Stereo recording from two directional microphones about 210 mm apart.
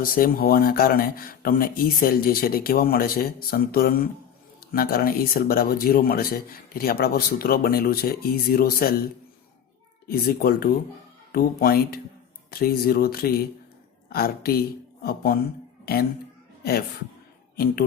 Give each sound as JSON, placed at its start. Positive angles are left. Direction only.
{"t": 0.0, "sound": "speech", "side_deg": 45}
{"t": 10.1, "sound": "speech", "side_deg": 45}
{"t": 17.6, "sound": "speech", "side_deg": 45}